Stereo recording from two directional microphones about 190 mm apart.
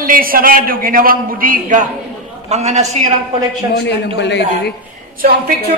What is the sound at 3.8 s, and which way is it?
Speech, 65° left (ahead or behind).